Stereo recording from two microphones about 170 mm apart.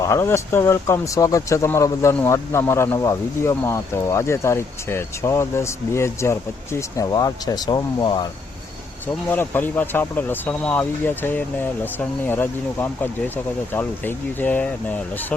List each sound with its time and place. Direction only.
0.0 s speech: 15° left (ahead or behind)
9.3 s speech: 10° left (ahead or behind)